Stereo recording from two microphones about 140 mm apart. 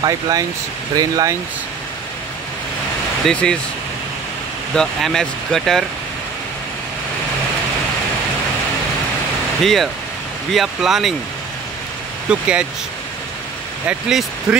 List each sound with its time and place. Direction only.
0.0 s speech: 25° right (ahead or behind)
3.3 s speech: 5° left (ahead or behind)
4.7 s speech: 5° left (ahead or behind)
9.6 s speech: centre (ahead or behind)
12.3 s speech: 10° right (ahead or behind)
13.8 s speech: 5° right (ahead or behind)